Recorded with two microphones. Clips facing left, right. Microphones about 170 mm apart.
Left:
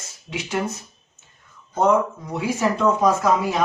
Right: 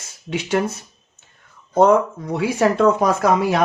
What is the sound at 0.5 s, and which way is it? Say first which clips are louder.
Speech: right 4 dB; 60° right (ahead or behind).